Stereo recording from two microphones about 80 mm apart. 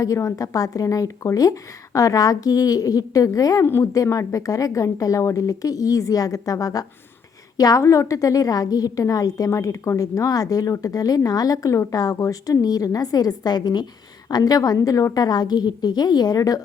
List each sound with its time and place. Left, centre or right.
0.0 s a woman's voice: left